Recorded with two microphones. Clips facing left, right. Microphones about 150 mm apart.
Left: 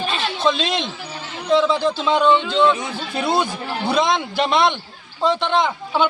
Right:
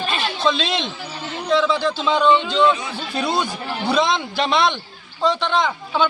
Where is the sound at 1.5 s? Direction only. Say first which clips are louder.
Left 2 dB; 20° left (ahead or behind).